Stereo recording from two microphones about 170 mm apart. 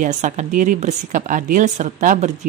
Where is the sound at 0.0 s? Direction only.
45° right (ahead or behind).